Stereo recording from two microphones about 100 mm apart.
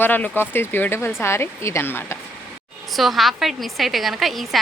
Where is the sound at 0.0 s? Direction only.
20° left (ahead or behind).